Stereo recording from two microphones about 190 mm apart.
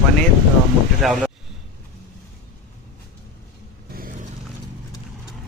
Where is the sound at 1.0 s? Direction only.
Centre (ahead or behind).